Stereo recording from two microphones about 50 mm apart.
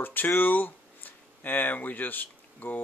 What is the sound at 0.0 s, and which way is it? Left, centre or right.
Speech, left.